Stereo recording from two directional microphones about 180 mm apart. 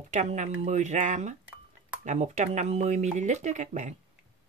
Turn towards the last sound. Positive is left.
turn(degrees=-40)  # may be behind; listen again after turning